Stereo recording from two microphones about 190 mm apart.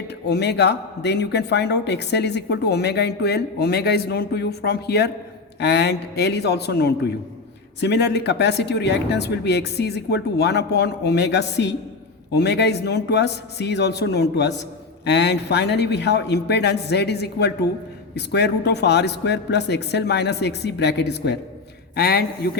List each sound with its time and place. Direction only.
0.3 s speech: 60° left (ahead or behind)